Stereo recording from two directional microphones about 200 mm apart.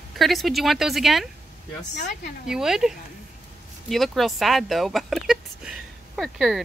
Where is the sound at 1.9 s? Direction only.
35° left (ahead or behind).